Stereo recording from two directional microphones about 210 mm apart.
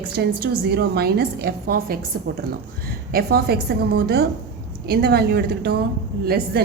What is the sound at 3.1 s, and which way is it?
A woman's voice, 45° right (ahead or behind).